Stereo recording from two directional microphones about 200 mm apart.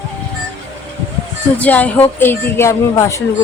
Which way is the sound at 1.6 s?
5° left (ahead or behind).